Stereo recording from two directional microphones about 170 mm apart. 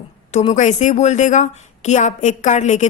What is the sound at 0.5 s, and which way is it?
A woman's voice, 45° left (ahead or behind).